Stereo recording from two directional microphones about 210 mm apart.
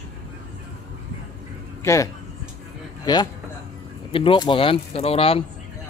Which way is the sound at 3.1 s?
20° left (ahead or behind).